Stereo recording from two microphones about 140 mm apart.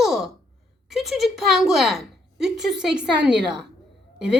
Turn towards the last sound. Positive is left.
turn(degrees=-5)  # may be behind; listen again after turning